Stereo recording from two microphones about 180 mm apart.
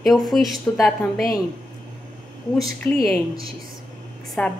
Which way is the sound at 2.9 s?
10° left (ahead or behind).